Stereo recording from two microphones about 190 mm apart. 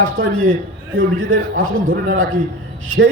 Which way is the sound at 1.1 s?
45° right (ahead or behind).